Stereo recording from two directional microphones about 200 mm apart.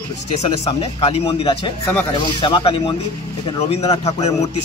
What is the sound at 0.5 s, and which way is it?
A man's voice, 30° left (ahead or behind).